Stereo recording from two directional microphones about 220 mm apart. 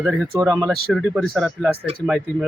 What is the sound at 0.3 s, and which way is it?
Speech, 15° right (ahead or behind).